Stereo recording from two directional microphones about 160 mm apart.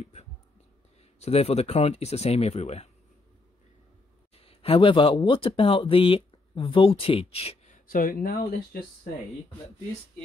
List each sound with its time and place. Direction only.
0.0 s speech: 45° left (ahead or behind)
4.4 s speech: 35° left (ahead or behind); by 8.5 s 65° left (ahead or behind)